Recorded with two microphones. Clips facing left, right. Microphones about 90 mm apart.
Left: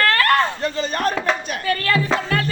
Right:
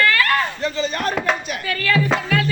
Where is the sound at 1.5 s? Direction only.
45° left (ahead or behind).